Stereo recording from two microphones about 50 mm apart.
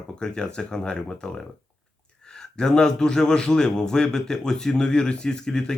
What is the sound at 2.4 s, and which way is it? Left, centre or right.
A man's voice, centre.